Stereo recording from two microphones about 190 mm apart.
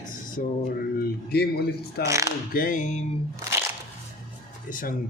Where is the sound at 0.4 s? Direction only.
50° left (ahead or behind).